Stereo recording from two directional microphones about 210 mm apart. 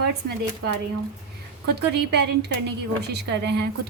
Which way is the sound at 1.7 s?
50° right (ahead or behind).